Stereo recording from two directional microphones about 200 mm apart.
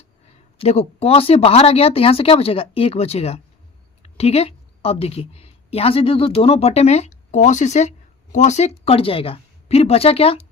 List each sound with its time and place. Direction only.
0.6 s a woman's voice: 30° left (ahead or behind)